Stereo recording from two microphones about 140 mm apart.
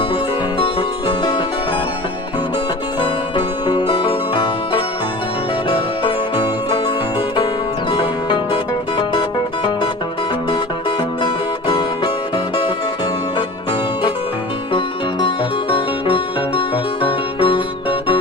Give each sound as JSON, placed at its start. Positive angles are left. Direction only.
{"t": 0.6, "sound": "music", "side_deg": 40}
{"t": 3.0, "sound": "music", "side_deg": 35}
{"t": 15.7, "sound": "music", "side_deg": 40}